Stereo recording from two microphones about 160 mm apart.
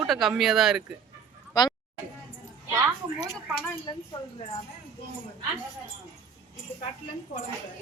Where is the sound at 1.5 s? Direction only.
25° left (ahead or behind).